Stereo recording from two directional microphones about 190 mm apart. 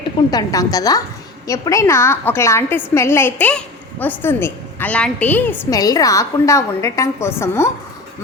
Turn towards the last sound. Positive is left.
turn(degrees=15)  # may be behind; listen again after turning